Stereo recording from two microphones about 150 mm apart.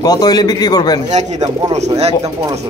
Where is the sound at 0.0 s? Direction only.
25° left (ahead or behind).